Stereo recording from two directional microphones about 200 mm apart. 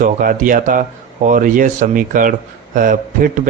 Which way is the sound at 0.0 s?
45° right (ahead or behind).